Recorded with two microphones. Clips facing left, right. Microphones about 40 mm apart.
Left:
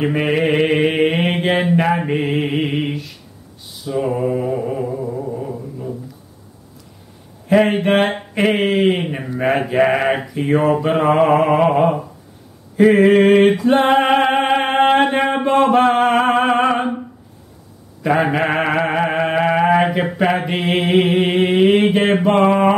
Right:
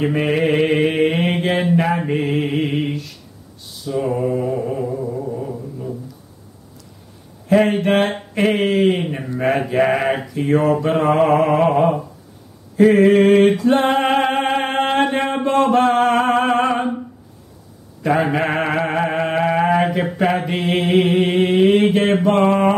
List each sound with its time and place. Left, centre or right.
0.0 s mantra: centre
7.4 s a sound: centre
9.4 s mantra: centre
12.7 s a sound: centre
15.4 s music: centre
18.0 s mantra: centre